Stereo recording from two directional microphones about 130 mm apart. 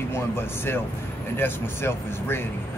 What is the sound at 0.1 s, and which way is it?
Speech, 20° left (ahead or behind).